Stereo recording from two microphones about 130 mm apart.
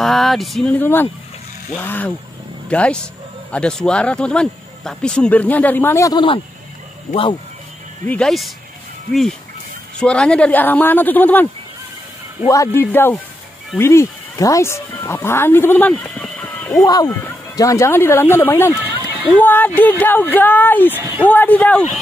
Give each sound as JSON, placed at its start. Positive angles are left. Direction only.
{"t": 0.0, "sound": "speech", "side_deg": 0}
{"t": 0.7, "sound": "speech", "side_deg": 15}
{"t": 6.1, "sound": "speech", "side_deg": 40}
{"t": 8.0, "sound": "speech", "side_deg": 10}
{"t": 9.9, "sound": "speech", "side_deg": 5}
{"t": 12.4, "sound": "a man's voice", "side_deg": 20}
{"t": 16.8, "sound": "speech", "side_deg": 30}
{"t": 18.8, "sound": "a sound", "side_deg": -10}
{"t": 19.3, "sound": "speech", "side_deg": 15}